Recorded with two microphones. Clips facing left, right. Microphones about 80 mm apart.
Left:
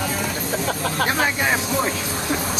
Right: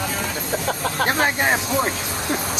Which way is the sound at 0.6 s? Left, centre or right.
Right.